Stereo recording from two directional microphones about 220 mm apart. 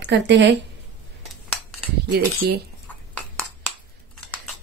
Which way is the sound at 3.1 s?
5° left (ahead or behind).